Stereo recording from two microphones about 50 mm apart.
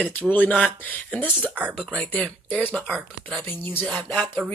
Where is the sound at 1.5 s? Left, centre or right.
Right.